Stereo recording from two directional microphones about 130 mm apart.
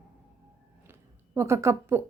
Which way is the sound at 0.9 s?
20° right (ahead or behind).